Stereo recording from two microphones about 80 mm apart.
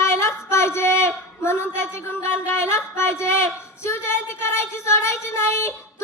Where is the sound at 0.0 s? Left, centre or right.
Left.